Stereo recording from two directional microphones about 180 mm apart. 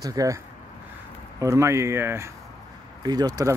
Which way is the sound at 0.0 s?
20° right (ahead or behind).